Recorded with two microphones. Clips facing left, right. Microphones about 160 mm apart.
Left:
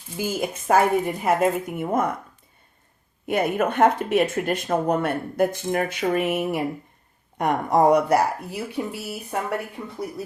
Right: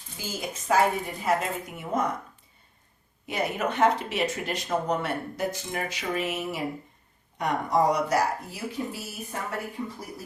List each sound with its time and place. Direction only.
0.2 s speech: 55° left (ahead or behind)
3.2 s speech: 55° left (ahead or behind)